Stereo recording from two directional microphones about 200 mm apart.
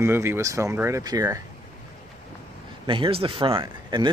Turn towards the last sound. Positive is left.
turn(degrees=-25)  # may be behind; listen again after turning